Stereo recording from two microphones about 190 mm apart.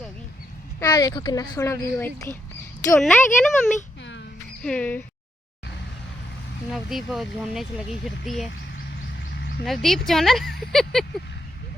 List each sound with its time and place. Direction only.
0.8 s speech: 20° left (ahead or behind)
6.7 s speech: centre (ahead or behind)
9.6 s speech: centre (ahead or behind)